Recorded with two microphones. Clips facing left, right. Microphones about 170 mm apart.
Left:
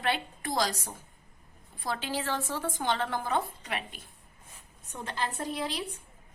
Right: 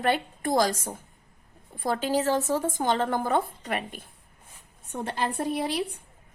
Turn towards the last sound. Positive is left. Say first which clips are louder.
# right 6 dB
turn(degrees=-55)  # may be behind; listen again after turning